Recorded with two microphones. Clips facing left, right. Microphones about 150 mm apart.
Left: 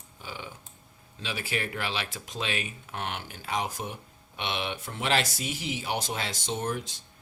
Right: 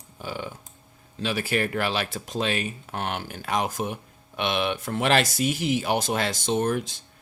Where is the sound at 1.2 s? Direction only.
50° right (ahead or behind).